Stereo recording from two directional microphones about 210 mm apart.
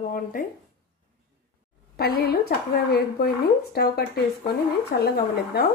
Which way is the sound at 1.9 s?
50° left (ahead or behind).